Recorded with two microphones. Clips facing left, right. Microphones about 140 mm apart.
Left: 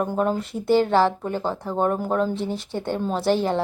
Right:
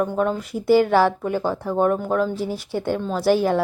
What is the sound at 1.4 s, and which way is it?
Speech, 20° left (ahead or behind).